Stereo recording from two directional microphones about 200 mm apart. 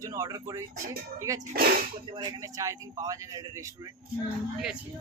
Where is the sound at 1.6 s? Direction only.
50° right (ahead or behind).